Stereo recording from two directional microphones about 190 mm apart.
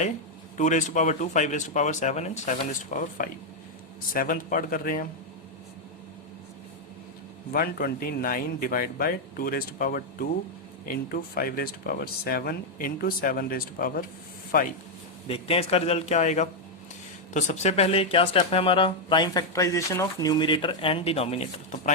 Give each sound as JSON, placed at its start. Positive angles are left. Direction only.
{"t": 0.5, "sound": "speech", "side_deg": 40}
{"t": 7.5, "sound": "speech", "side_deg": 50}
{"t": 15.3, "sound": "speech", "side_deg": 30}